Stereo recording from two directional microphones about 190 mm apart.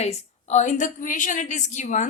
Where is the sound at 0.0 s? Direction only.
35° left (ahead or behind).